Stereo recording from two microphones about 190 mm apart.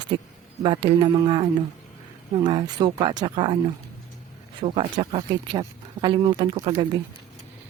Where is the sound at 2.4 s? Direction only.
25° right (ahead or behind).